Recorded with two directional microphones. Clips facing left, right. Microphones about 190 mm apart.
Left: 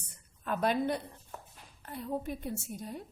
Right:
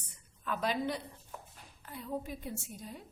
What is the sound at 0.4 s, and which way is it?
A woman's voice, 50° left (ahead or behind).